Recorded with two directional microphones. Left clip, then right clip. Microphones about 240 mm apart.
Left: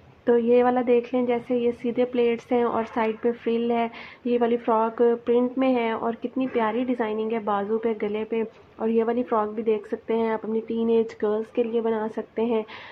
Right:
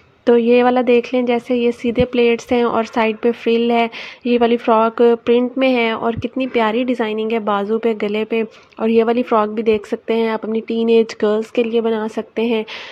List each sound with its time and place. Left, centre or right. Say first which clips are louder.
0.2 s speech: right 7 dB; right